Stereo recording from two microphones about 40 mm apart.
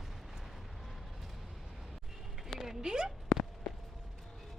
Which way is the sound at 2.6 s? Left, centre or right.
Centre.